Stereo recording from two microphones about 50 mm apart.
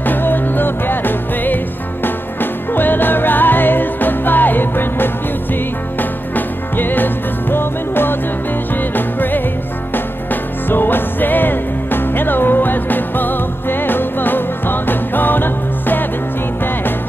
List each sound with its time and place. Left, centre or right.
0.0 s music: left
2.7 s music: left
10.7 s music: left